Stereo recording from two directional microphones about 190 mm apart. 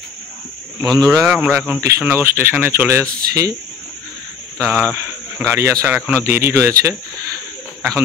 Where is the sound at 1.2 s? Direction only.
5° right (ahead or behind).